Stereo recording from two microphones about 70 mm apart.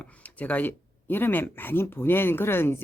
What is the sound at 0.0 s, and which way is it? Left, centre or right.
Speech, left.